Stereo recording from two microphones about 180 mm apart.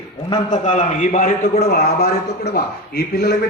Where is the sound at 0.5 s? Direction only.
40° left (ahead or behind).